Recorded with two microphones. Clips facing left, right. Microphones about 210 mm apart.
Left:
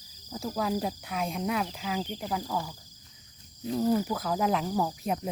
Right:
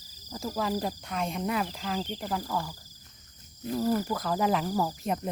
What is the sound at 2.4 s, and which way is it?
Speech, 15° left (ahead or behind).